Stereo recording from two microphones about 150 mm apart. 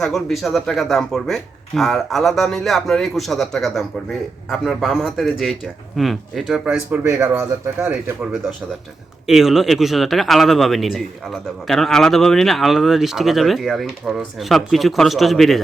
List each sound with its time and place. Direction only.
0.0 s speech: centre (ahead or behind); by 7.9 s 20° right (ahead or behind)
7.9 s speech: 10° right (ahead or behind)